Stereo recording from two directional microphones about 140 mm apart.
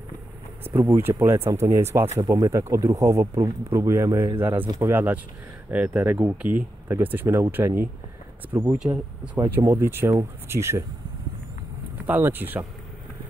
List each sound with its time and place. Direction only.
0.7 s speech: 15° right (ahead or behind)
4.6 s speech: 25° right (ahead or behind)
4.9 s speech: 10° right (ahead or behind)
8.6 s speech: 5° right (ahead or behind)
12.1 s speech: 15° right (ahead or behind)